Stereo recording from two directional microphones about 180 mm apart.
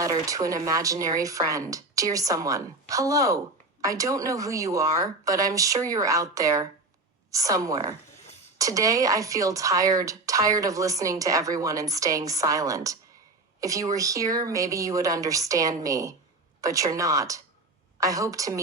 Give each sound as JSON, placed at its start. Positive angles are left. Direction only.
{"t": 0.0, "sound": "speech", "side_deg": -20}